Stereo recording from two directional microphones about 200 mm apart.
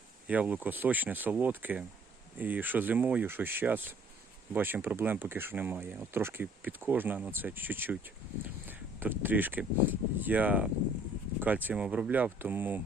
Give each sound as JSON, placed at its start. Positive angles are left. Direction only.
{"t": 0.3, "sound": "speech", "side_deg": -5}